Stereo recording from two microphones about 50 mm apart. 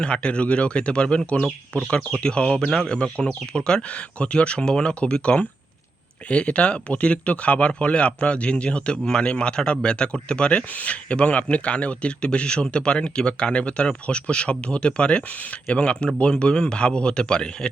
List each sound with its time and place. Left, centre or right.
0.0 s speech: left